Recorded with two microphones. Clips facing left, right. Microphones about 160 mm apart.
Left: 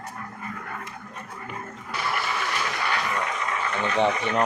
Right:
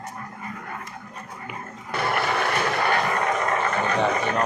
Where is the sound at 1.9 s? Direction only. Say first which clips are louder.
Right 5 dB; 55° right (ahead or behind).